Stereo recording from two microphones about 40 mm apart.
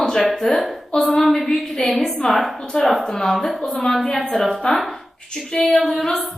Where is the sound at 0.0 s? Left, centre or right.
Centre.